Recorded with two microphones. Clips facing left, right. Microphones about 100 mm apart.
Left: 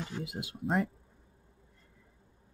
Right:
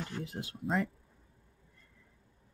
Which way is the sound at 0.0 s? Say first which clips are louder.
Left 1 dB; 10° left (ahead or behind).